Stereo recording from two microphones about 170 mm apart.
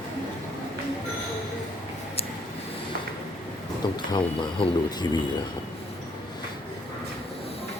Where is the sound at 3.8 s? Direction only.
25° left (ahead or behind).